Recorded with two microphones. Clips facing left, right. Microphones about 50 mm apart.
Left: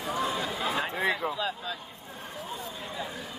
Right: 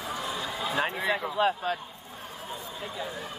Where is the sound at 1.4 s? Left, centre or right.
Right.